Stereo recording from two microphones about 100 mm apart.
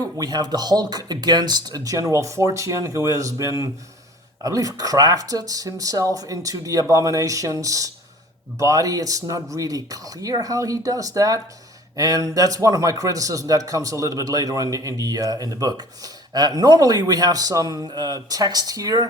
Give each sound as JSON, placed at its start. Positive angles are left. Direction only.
{"t": 0.2, "sound": "a man's voice", "side_deg": -45}